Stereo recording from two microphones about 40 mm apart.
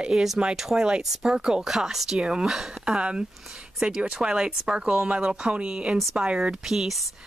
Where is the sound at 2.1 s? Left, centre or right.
Right.